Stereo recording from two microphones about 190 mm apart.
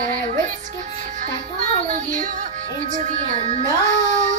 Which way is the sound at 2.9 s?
40° right (ahead or behind).